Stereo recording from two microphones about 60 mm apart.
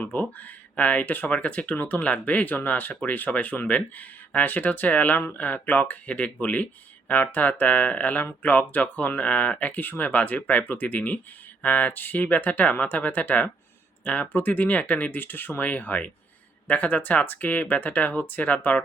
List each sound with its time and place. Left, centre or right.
0.0 s speech: left